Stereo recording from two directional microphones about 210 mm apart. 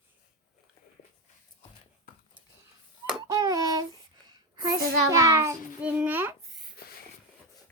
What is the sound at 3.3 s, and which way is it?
Hands, 15° right (ahead or behind).